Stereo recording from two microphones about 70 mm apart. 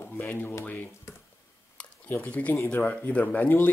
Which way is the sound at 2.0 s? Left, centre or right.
Left.